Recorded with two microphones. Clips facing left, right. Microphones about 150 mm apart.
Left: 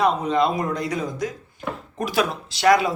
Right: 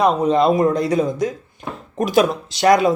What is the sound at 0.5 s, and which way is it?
Speech, 30° right (ahead or behind).